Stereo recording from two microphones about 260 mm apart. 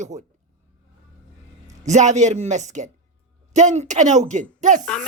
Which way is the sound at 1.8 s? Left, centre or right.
Right.